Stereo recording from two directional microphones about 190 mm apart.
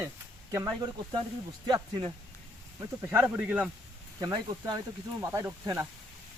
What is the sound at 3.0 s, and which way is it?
Speech, 10° right (ahead or behind).